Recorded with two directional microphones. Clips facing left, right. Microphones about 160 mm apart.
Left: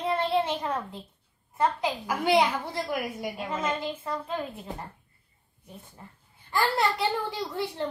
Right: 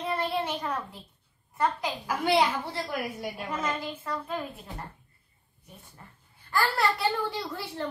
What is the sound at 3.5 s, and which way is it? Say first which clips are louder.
Speech: left 2 dB; 25° left (ahead or behind).